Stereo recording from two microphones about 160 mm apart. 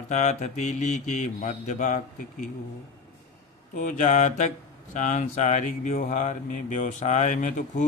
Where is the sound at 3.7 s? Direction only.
55° left (ahead or behind).